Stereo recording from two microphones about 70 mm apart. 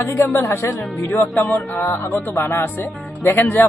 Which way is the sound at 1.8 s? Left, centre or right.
Left.